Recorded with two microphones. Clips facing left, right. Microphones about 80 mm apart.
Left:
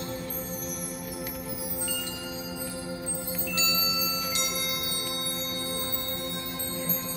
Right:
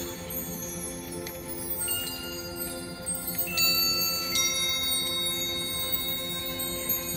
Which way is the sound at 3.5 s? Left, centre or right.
Left.